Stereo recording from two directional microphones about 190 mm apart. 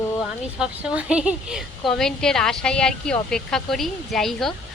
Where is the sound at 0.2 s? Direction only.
5° right (ahead or behind).